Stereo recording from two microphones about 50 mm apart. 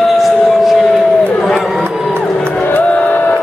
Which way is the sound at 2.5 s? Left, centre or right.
Left.